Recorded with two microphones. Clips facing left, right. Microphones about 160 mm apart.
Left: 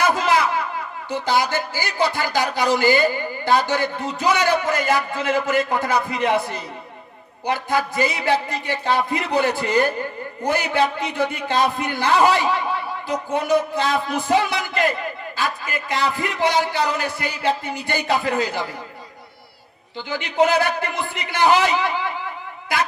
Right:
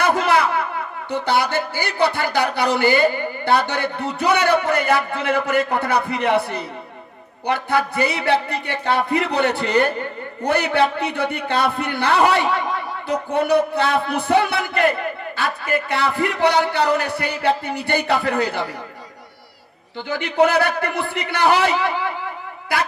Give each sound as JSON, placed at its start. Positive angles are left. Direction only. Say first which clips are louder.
{"t": 0.0, "sound": "a sound", "louder": "right 1 dB", "side_deg": -60}
{"t": 1.1, "sound": "speech", "louder": "right 1 dB", "side_deg": -60}
{"t": 20.0, "sound": "speech", "louder": "right 2 dB", "side_deg": -55}